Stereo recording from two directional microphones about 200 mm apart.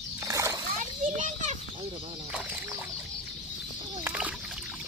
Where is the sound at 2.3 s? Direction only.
5° right (ahead or behind).